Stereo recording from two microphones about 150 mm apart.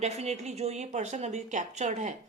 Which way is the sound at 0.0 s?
45° right (ahead or behind).